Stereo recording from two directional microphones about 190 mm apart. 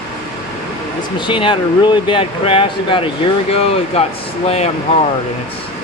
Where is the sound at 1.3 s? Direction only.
25° left (ahead or behind).